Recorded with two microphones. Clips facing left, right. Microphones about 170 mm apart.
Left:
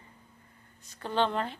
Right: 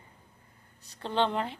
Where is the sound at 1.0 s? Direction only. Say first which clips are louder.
Even; 20° right (ahead or behind).